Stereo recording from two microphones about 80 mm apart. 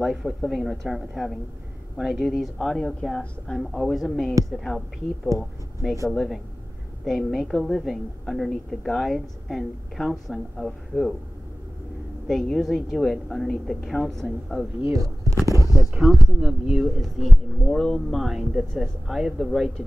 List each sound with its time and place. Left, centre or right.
0.0 s a woman's voice: centre
12.3 s a woman's voice: centre
14.9 s speech: right
15.9 s a woman's voice: centre